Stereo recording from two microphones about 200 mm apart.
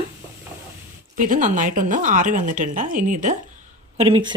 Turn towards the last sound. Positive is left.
turn(degrees=-25)  # may be behind; listen again after turning